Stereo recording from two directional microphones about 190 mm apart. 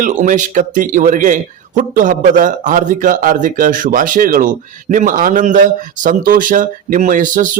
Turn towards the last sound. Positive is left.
turn(degrees=-45)  # may be behind; listen again after turning